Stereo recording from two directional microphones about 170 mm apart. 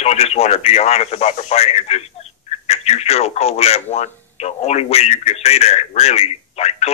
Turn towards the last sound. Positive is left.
turn(degrees=40)  # may be behind; listen again after turning